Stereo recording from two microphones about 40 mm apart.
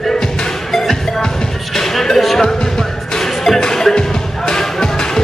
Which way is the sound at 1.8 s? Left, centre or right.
Centre.